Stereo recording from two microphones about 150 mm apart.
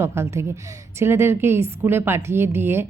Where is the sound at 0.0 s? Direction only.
15° right (ahead or behind).